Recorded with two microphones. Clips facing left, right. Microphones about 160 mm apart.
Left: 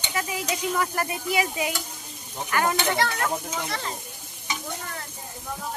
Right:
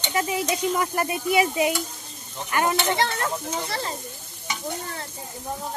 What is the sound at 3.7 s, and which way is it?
Speech, 35° right (ahead or behind).